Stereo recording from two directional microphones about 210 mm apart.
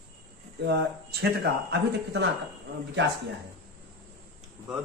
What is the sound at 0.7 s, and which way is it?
Speech, 50° right (ahead or behind).